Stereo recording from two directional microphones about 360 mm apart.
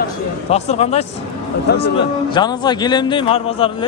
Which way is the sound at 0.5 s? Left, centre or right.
Centre.